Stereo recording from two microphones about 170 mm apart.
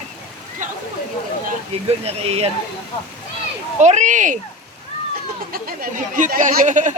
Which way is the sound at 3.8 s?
45° right (ahead or behind).